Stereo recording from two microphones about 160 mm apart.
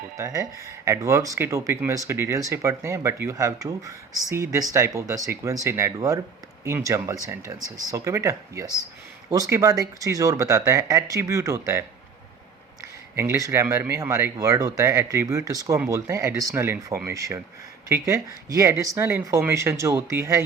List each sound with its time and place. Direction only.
0.2 s speech: 20° right (ahead or behind)
13.1 s speech: 20° right (ahead or behind)